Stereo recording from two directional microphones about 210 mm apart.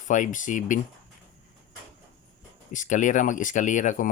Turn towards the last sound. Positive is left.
turn(degrees=40)  # may be behind; listen again after turning